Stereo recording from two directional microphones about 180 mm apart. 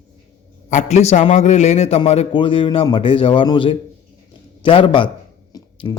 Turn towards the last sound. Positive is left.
turn(degrees=25)  # may be behind; listen again after turning